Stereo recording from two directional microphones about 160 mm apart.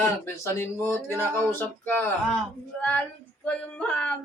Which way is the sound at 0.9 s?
15° left (ahead or behind).